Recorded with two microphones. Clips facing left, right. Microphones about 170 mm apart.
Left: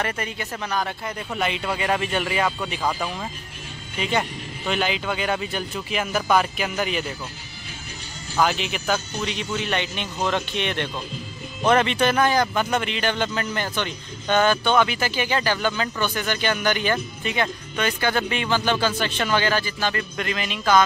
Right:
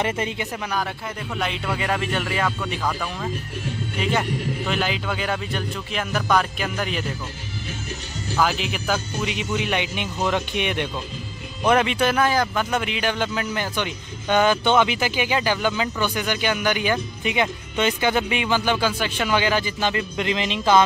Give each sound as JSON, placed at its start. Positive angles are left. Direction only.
{"t": 0.0, "sound": "speech", "side_deg": -20}
{"t": 1.3, "sound": "speech", "side_deg": 5}
{"t": 8.4, "sound": "speech", "side_deg": 0}